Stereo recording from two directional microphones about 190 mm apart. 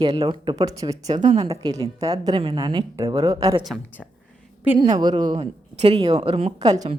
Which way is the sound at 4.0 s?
Centre (ahead or behind).